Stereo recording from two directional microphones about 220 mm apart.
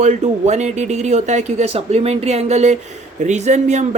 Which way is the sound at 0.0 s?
30° right (ahead or behind).